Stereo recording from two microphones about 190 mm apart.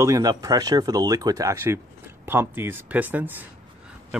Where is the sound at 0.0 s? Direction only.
20° right (ahead or behind).